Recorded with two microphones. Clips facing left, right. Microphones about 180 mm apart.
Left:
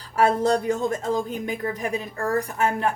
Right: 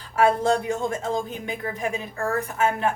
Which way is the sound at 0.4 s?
40° left (ahead or behind).